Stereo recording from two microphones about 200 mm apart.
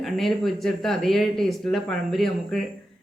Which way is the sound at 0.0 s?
Centre (ahead or behind).